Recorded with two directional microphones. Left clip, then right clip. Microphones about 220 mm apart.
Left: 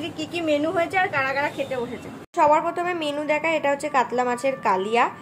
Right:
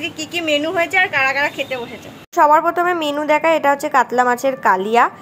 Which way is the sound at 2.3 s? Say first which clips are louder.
Right 6 dB; 20° right (ahead or behind).